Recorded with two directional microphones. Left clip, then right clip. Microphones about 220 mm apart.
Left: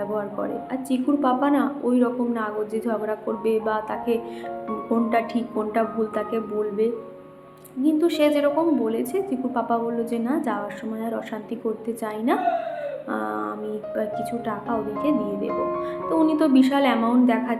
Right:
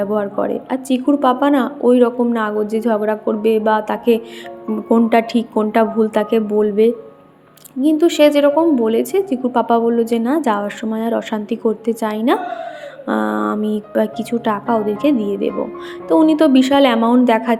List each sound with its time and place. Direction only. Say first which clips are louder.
0.0 s a woman's voice: right 9 dB; 35° right (ahead or behind)